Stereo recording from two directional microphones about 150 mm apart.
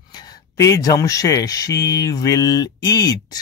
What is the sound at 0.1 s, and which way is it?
Speech, 25° left (ahead or behind).